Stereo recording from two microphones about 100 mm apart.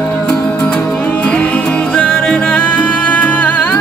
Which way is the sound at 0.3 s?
15° left (ahead or behind).